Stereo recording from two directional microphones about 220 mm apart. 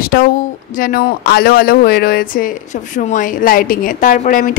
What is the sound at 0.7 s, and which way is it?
A woman's voice, 40° left (ahead or behind).